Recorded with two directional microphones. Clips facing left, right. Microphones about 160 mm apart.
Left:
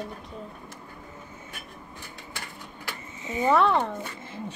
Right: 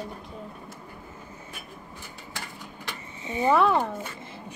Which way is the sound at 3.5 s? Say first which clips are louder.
Even; 5° right (ahead or behind).